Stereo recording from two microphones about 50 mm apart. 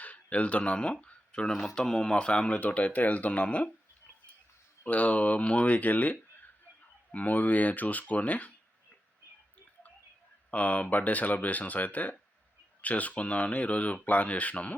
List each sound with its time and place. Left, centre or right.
0.0 s speech: left
1.0 s a sound: centre
1.7 s speech: centre
4.9 s speech: left
10.5 s speech: left